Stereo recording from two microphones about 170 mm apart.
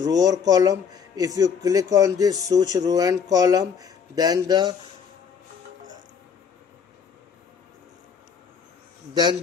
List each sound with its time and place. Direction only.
0.0 s a man's voice: 20° right (ahead or behind)